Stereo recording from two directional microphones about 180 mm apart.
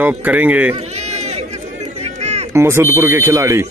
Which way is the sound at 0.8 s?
35° right (ahead or behind).